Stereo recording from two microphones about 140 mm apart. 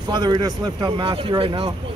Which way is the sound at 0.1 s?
30° right (ahead or behind).